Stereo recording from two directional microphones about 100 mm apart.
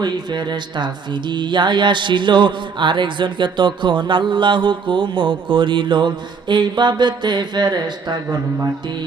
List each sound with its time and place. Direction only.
0.0 s music: 45° right (ahead or behind)